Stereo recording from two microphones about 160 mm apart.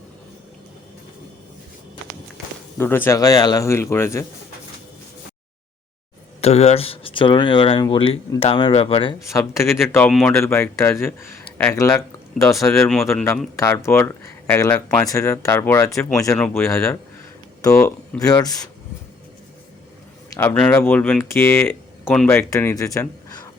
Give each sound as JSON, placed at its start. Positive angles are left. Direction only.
{"t": 2.7, "sound": "speech", "side_deg": 15}
{"t": 6.4, "sound": "speech", "side_deg": 40}
{"t": 9.3, "sound": "speech", "side_deg": 15}
{"t": 10.1, "sound": "speech", "side_deg": 0}
{"t": 10.3, "sound": "speech", "side_deg": 15}
{"t": 12.7, "sound": "speech", "side_deg": 5}
{"t": 13.6, "sound": "speech", "side_deg": 15}
{"t": 20.3, "sound": "a man's voice", "side_deg": 10}
{"t": 22.3, "sound": "speech", "side_deg": 15}